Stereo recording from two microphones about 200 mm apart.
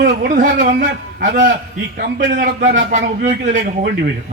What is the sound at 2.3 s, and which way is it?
A man's voice, 40° right (ahead or behind).